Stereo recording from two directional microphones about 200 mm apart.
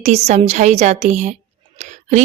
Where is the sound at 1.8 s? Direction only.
35° right (ahead or behind).